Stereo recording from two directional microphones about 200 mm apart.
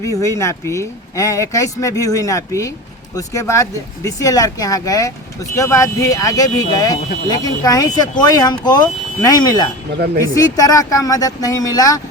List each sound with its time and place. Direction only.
0.0 s speech: 15° left (ahead or behind)